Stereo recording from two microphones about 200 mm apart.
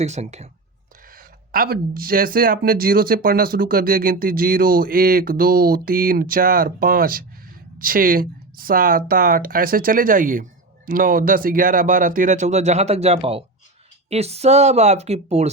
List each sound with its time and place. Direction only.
0.0 s speech: 35° right (ahead or behind)
1.1 s speech: 45° right (ahead or behind)